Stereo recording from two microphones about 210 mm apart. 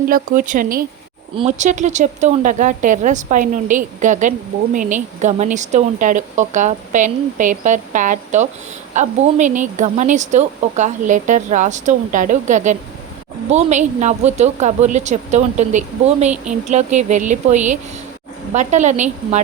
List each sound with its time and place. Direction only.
0.1 s speech: 40° right (ahead or behind)